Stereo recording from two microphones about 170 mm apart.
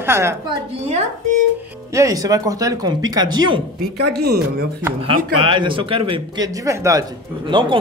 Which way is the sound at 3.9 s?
70° right (ahead or behind).